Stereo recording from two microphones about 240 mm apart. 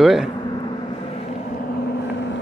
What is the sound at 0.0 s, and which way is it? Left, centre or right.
Vehicle, centre.